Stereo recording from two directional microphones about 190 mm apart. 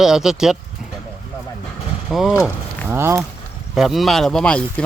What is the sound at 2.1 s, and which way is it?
Speech, centre (ahead or behind).